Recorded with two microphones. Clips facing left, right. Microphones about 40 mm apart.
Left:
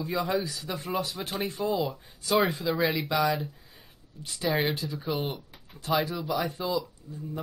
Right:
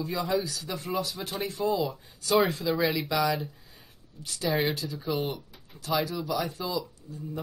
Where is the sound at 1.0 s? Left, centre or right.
Left.